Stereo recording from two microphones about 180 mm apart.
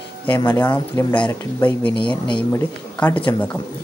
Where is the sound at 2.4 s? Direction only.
10° left (ahead or behind).